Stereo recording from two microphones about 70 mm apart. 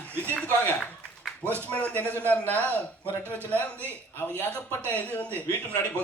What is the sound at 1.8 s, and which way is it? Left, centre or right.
A man's voice, left.